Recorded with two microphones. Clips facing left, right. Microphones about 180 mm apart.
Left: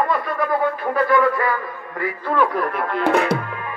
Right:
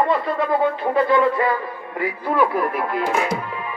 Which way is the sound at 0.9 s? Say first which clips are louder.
Even; 25° right (ahead or behind).